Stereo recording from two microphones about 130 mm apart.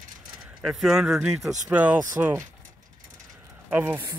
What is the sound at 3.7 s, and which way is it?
Speech, 15° right (ahead or behind).